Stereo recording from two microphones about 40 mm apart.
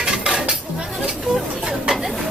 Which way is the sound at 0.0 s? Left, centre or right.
Centre.